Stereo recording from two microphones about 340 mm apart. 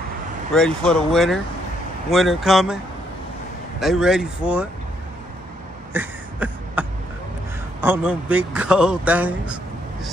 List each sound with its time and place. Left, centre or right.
0.6 s speech: centre
3.8 s speech: centre
5.9 s a sound: centre
7.8 s speech: centre